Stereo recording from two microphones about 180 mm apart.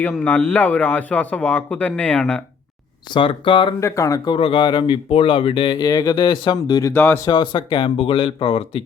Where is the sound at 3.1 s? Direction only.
30° left (ahead or behind).